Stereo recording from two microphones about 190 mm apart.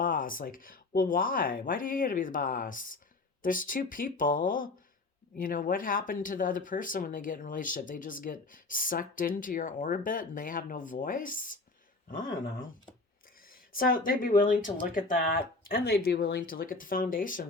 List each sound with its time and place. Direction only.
0.0 s speech: 45° left (ahead or behind)